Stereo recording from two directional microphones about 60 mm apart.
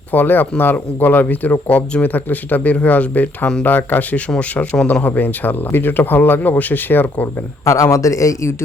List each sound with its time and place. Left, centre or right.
0.1 s speech: left
4.4 s speech: centre
5.0 s speech: left
7.6 s a man's voice: left